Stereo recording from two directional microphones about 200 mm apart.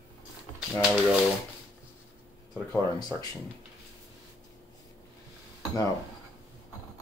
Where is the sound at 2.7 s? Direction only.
20° left (ahead or behind).